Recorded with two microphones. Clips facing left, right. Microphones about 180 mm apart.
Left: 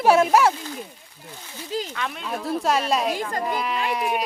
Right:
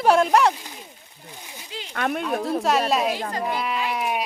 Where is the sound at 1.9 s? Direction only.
55° right (ahead or behind).